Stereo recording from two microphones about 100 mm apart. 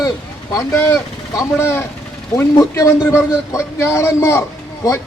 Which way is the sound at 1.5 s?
25° left (ahead or behind).